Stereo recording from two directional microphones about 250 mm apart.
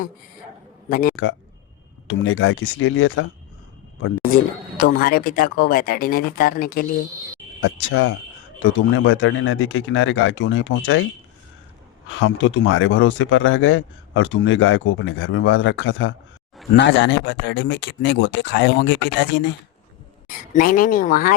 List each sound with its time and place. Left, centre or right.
0.9 s a man's voice: left
1.1 s speech: left
4.8 s speech: left
7.6 s speech: left
12.0 s speech: left
20.2 s speech: left